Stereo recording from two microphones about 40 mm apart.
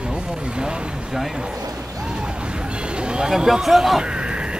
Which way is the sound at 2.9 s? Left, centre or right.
Right.